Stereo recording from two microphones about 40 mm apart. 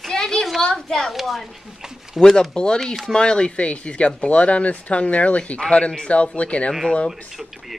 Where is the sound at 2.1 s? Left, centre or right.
Left.